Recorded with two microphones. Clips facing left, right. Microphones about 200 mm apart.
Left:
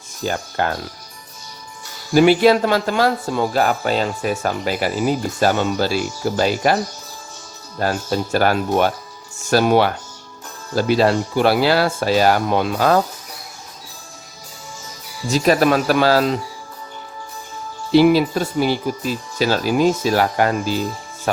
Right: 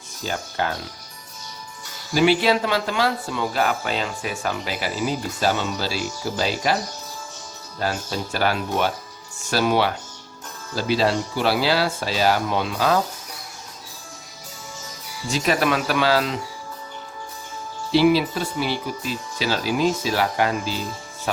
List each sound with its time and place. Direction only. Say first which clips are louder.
0.3 s speech: left 4 dB; 55° left (ahead or behind)
2.1 s speech: left 6 dB; 50° left (ahead or behind)
7.8 s speech: left 6 dB; 50° left (ahead or behind)
15.3 s speech: left 6 dB; 40° left (ahead or behind)
17.9 s speech: left 4 dB; 50° left (ahead or behind)